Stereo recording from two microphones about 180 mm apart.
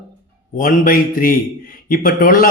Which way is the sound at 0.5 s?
50° left (ahead or behind).